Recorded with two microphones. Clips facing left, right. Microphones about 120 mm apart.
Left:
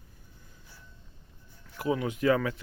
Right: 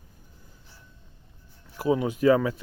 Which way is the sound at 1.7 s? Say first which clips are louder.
Right 5 dB; 25° right (ahead or behind).